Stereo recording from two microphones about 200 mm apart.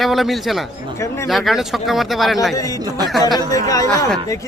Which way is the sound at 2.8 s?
20° right (ahead or behind).